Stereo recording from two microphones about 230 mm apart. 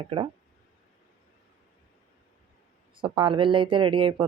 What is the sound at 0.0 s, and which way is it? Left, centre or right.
Speech, right.